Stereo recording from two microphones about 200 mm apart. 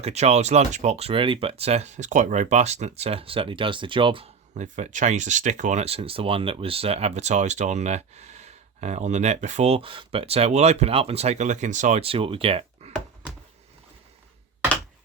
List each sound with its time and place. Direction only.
0.0 s speech: 35° right (ahead or behind)